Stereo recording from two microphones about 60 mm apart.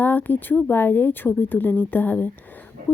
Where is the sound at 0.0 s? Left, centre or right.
Left.